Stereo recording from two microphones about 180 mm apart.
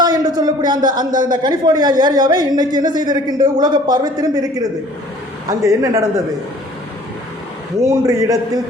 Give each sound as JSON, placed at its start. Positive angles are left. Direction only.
{"t": 0.0, "sound": "a sound", "side_deg": -20}
{"t": 1.1, "sound": "a man's voice", "side_deg": -45}
{"t": 1.4, "sound": "a man's voice", "side_deg": -20}
{"t": 7.9, "sound": "a man's voice", "side_deg": -20}